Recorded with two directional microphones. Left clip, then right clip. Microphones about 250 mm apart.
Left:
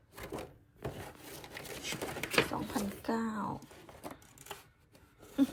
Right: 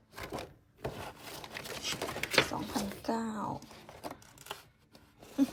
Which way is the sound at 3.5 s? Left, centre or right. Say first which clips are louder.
Right 2 dB; centre.